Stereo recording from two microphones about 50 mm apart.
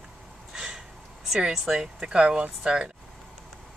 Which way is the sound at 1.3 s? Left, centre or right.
Centre.